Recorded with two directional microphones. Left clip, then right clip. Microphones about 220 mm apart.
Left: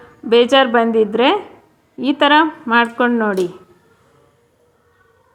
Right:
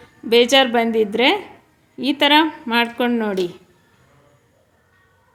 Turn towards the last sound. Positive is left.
turn(degrees=0)  # may be behind; listen again after turning